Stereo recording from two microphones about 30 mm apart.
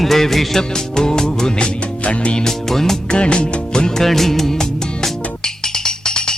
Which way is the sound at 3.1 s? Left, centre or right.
Left.